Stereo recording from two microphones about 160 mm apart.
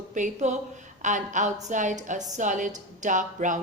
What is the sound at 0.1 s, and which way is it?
A woman's voice, 50° right (ahead or behind).